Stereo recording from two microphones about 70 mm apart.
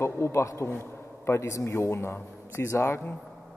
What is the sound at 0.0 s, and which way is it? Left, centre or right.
A man's voice, left.